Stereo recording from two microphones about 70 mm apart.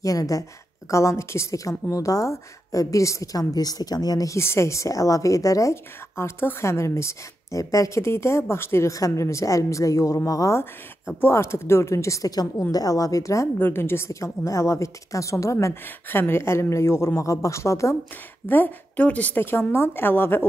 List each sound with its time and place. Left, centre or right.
0.0 s a woman's voice: left
4.4 s a woman's voice: left
8.9 s a woman's voice: left
10.6 s a woman's voice: left
13.6 s a woman's voice: left
15.8 s a woman's voice: left
18.5 s a woman's voice: left